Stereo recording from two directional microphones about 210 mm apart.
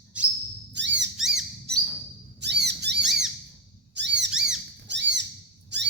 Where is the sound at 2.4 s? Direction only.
50° right (ahead or behind).